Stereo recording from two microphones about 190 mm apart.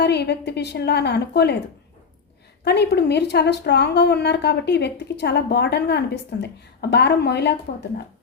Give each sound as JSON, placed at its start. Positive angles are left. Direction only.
{"t": 0.0, "sound": "a woman's voice", "side_deg": 60}
{"t": 2.6, "sound": "a woman's voice", "side_deg": 60}